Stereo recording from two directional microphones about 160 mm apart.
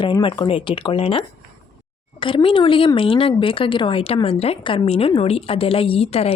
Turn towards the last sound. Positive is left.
turn(degrees=40)  # may be behind; listen again after turning